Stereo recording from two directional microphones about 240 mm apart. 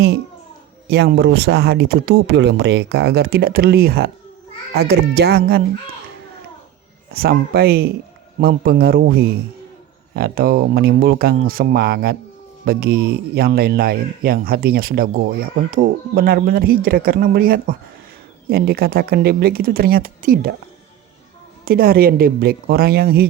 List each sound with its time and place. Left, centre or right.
0.9 s speech: right
7.1 s speech: right
21.6 s speech: right